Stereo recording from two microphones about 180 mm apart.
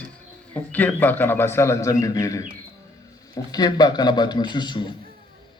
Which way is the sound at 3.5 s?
20° left (ahead or behind).